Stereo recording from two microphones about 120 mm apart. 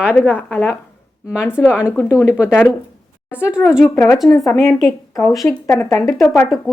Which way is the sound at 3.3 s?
10° right (ahead or behind).